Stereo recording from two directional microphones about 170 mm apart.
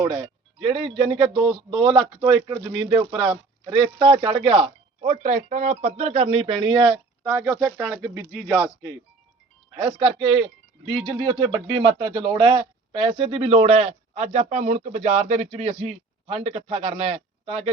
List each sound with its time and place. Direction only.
0.0 s speech: 30° right (ahead or behind); by 8.2 s 15° right (ahead or behind)
8.4 s speech: 5° right (ahead or behind)
9.7 s speech: 30° right (ahead or behind)